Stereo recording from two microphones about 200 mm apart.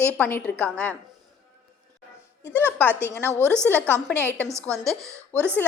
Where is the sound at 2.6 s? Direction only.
10° left (ahead or behind).